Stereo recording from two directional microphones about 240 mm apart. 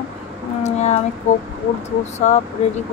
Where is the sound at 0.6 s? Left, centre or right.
Left.